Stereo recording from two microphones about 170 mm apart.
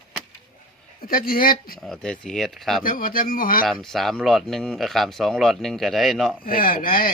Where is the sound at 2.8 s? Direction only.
55° left (ahead or behind).